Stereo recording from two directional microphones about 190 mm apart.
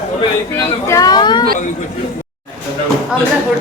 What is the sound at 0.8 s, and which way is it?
Speech, 20° left (ahead or behind).